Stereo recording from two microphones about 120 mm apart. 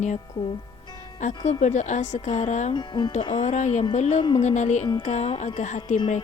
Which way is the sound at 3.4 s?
65° left (ahead or behind).